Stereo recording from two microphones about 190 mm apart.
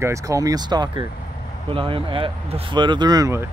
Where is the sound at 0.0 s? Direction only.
15° right (ahead or behind).